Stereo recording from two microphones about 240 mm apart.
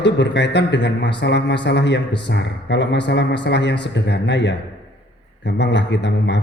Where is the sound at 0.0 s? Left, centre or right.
Left.